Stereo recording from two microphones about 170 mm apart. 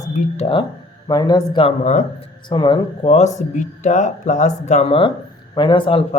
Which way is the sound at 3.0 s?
40° left (ahead or behind).